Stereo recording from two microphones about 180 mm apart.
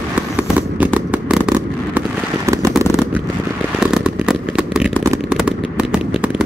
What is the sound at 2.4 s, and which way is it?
Fireworks, 15° right (ahead or behind).